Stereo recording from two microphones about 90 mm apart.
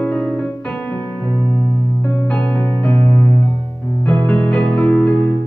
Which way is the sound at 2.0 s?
10° left (ahead or behind).